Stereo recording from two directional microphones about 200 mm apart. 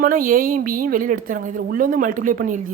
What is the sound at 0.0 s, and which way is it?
A woman's voice, 45° right (ahead or behind).